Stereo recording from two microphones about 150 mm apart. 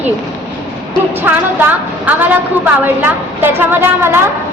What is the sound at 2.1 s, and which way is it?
A woman's voice, 10° right (ahead or behind).